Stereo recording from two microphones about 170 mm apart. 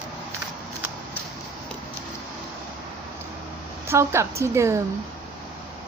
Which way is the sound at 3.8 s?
15° right (ahead or behind).